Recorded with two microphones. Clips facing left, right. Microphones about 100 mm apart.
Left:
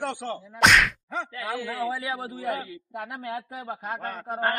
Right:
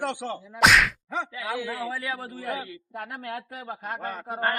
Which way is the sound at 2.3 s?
Centre (ahead or behind).